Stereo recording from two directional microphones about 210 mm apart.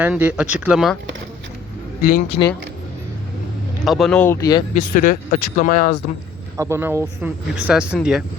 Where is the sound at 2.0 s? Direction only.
45° left (ahead or behind).